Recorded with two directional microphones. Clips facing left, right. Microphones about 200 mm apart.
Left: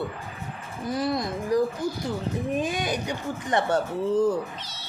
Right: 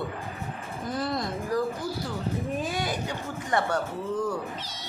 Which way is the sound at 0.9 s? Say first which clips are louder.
Left 3 dB; 10° left (ahead or behind).